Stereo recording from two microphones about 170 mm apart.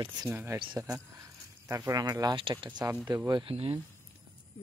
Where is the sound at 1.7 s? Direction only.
20° right (ahead or behind); by 3.7 s 35° right (ahead or behind).